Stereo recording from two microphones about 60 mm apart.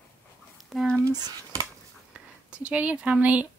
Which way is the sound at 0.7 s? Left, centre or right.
Centre.